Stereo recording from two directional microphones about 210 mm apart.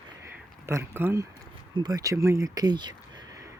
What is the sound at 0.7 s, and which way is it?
Speech, 10° right (ahead or behind).